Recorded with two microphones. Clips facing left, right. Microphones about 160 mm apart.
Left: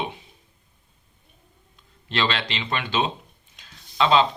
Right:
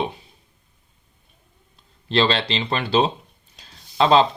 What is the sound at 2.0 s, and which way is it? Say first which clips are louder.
Speech: right 6 dB; 30° right (ahead or behind).